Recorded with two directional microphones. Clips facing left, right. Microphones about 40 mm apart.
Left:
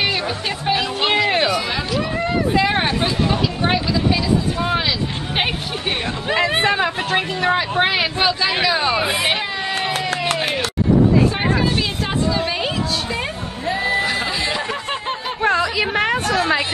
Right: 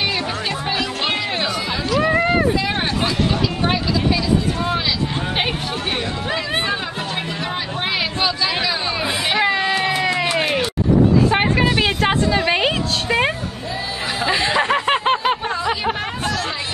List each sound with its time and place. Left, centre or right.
0.7 s music: centre
2.0 s run: right
2.5 s hubbub: left
3.6 s vehicle: centre
6.6 s chatter: left
7.1 s speech: left
7.8 s a sound: centre
8.9 s music: left
9.4 s a sound: right
11.2 s music: right
14.2 s snicker: right
14.6 s a sound: right
15.4 s a sound: left